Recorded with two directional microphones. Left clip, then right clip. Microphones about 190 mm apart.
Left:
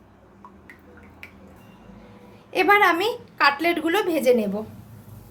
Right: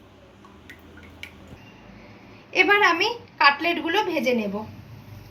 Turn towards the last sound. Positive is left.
turn(degrees=60)  # may be behind; listen again after turning